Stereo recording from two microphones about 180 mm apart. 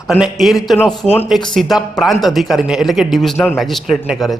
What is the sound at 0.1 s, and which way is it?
A man's voice, centre (ahead or behind).